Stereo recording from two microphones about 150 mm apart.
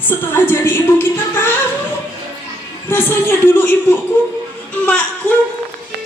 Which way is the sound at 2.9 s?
15° left (ahead or behind).